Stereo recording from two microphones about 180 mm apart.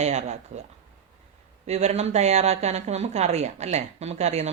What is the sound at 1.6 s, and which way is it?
Speech, 40° right (ahead or behind).